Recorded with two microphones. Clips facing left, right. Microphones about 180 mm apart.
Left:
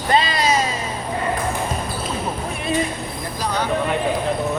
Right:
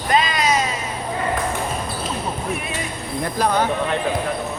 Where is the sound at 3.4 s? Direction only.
55° right (ahead or behind).